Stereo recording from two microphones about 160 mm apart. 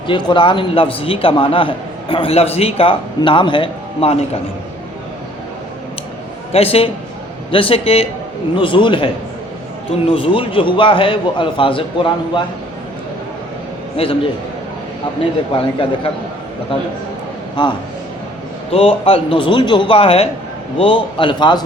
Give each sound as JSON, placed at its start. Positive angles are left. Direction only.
{"t": 0.1, "sound": "a man's voice", "side_deg": 30}
{"t": 6.5, "sound": "a man's voice", "side_deg": 35}
{"t": 10.1, "sound": "a man's voice", "side_deg": 35}
{"t": 13.9, "sound": "a man's voice", "side_deg": 35}
{"t": 15.5, "sound": "a man's voice", "side_deg": 35}
{"t": 17.6, "sound": "a man's voice", "side_deg": 30}